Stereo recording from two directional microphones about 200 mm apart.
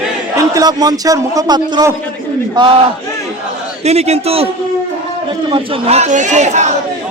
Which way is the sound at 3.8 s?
35° right (ahead or behind).